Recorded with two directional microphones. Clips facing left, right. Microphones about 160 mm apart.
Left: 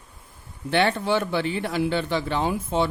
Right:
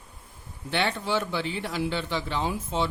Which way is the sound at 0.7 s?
55° left (ahead or behind).